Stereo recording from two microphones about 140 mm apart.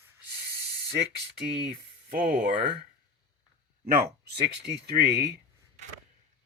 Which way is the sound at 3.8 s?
90° right.